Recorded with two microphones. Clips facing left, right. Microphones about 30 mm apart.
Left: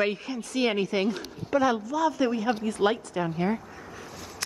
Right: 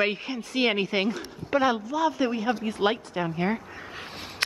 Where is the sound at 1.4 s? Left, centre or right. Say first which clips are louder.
Right 1 dB; right.